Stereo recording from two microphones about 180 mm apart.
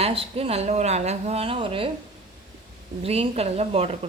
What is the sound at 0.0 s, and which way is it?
Speech, 35° right (ahead or behind).